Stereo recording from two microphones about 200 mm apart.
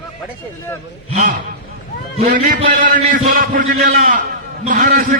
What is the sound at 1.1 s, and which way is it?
Speech, 35° right (ahead or behind).